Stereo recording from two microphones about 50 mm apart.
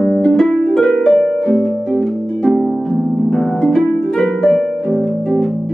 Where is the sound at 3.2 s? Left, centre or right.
Centre.